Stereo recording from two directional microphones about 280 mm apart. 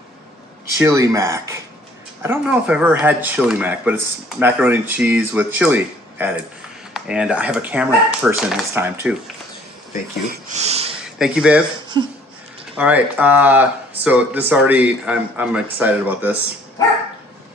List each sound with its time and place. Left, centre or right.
0.8 s speech: centre
10.5 s a sound: right
11.2 s speech: centre
12.7 s speech: centre